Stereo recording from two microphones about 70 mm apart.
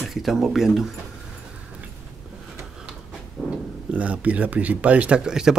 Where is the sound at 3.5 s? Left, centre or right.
Centre.